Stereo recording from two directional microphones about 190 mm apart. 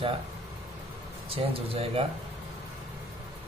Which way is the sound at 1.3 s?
30° right (ahead or behind).